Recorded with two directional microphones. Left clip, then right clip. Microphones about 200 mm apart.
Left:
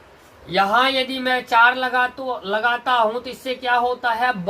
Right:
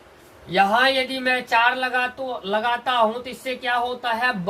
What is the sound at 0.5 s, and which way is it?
Speech, 15° left (ahead or behind).